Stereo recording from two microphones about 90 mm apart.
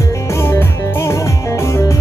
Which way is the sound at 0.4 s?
30° left (ahead or behind).